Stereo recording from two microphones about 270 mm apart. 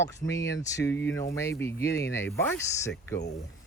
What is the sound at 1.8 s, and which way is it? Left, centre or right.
Speech, left.